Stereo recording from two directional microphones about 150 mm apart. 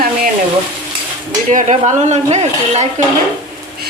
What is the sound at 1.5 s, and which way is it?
Speech, 55° right (ahead or behind).